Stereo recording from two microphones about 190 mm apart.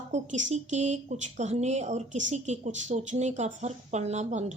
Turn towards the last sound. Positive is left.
turn(degrees=-40)  # may be behind; listen again after turning